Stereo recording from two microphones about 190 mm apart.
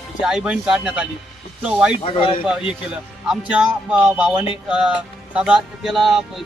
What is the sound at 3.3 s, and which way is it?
Speech, 5° right (ahead or behind).